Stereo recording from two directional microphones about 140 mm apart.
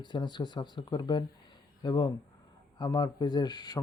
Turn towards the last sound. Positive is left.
turn(degrees=30)  # may be behind; listen again after turning